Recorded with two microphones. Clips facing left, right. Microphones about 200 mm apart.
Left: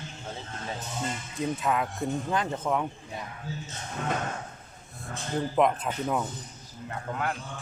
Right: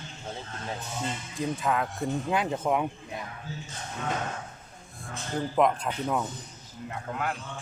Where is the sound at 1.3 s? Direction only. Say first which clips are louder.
Even; centre (ahead or behind).